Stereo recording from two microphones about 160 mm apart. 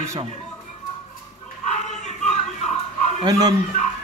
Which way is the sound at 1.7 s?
45° left (ahead or behind).